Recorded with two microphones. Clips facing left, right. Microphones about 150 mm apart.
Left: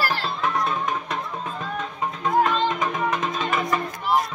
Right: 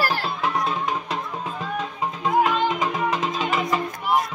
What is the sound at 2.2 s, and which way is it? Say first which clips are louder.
Music: even; 10° right (ahead or behind).